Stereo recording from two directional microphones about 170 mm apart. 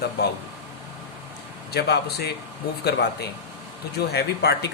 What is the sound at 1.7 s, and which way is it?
Speech, 70° left (ahead or behind).